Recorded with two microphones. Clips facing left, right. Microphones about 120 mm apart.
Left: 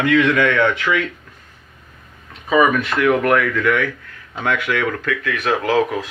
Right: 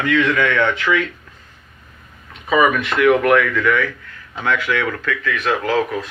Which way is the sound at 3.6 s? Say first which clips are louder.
Even; 60° left (ahead or behind).